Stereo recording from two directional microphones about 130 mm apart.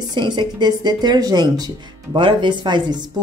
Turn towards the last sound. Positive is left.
turn(degrees=-35)  # may be behind; listen again after turning